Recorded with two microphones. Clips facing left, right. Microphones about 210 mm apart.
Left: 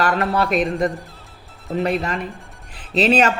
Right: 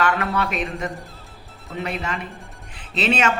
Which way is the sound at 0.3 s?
35° left (ahead or behind).